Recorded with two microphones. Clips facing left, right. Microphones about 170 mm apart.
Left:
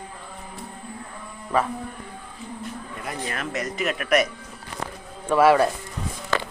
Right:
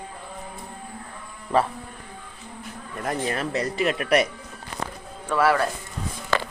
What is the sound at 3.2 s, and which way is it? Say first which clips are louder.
Speech: right 1 dB; 30° right (ahead or behind).